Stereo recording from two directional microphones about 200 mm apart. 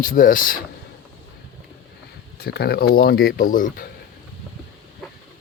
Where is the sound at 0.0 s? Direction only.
45° left (ahead or behind).